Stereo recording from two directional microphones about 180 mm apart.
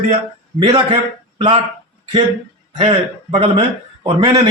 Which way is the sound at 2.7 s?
30° right (ahead or behind).